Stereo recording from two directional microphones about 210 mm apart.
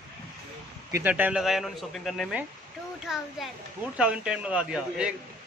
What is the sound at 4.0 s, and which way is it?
A man's voice, 5° right (ahead or behind).